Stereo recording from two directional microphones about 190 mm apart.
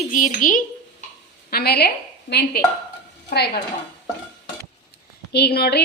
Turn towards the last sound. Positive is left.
turn(degrees=60)  # may be behind; listen again after turning